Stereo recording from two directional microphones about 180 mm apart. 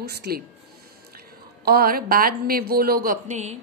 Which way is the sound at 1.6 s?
55° right (ahead or behind).